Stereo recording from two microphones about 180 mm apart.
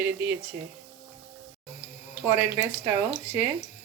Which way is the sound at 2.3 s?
10° right (ahead or behind).